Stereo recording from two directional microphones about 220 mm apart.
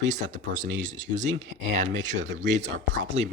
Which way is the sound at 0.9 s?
35° right (ahead or behind).